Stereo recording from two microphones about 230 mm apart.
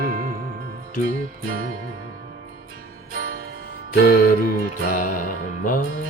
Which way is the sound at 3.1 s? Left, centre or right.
Right.